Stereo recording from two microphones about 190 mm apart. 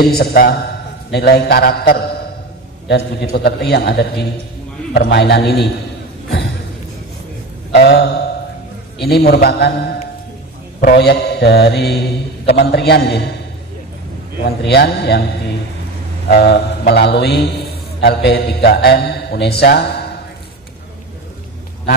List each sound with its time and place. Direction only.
0.1 s a man's voice: 55° left (ahead or behind)
2.9 s mantra: 60° left (ahead or behind)
7.7 s a sound: 60° left (ahead or behind)
9.0 s mantra: 55° left (ahead or behind)
14.4 s mantra: 60° left (ahead or behind)
16.3 s mantra: 60° left (ahead or behind)